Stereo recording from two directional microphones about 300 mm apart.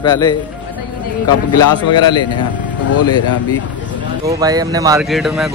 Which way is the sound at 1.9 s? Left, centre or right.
Centre.